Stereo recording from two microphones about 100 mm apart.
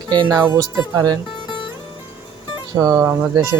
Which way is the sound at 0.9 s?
40° right (ahead or behind).